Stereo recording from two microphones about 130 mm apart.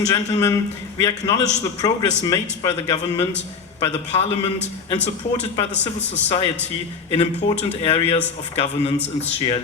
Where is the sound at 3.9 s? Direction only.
55° left (ahead or behind).